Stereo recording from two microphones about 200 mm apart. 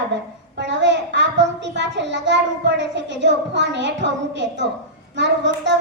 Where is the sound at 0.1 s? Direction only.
65° right (ahead or behind).